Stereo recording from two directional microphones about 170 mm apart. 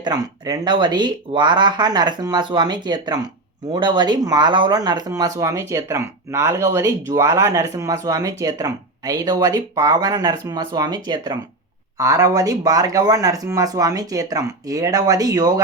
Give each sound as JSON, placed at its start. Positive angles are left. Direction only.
{"t": 0.0, "sound": "speech", "side_deg": -25}